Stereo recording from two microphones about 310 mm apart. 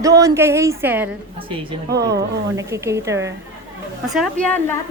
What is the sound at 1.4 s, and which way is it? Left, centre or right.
Speech, centre.